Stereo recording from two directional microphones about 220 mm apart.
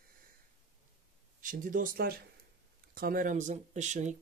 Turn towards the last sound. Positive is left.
turn(degrees=-35)  # may be behind; listen again after turning